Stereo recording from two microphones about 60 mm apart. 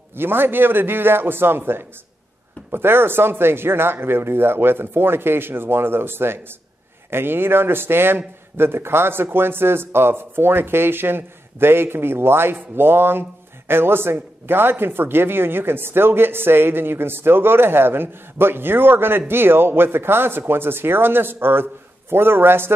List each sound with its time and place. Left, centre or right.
0.1 s speech: right